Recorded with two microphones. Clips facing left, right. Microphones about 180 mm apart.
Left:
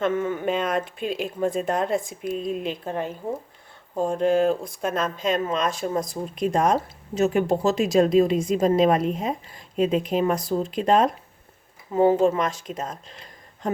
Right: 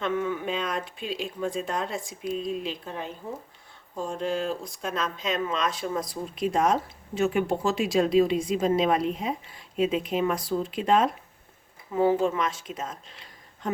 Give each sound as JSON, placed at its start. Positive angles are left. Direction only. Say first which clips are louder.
{"t": 0.0, "sound": "speech", "louder": "left 4 dB", "side_deg": 50}